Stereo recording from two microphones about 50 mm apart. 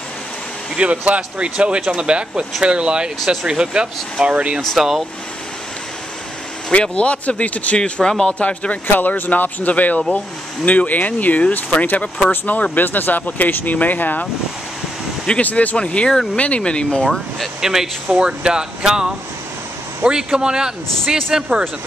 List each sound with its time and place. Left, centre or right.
0.7 s speech: right
4.7 s speech: centre
6.7 s speech: left
8.0 s speech: centre
8.4 s speech: left
15.4 s speech: left
17.6 s speech: centre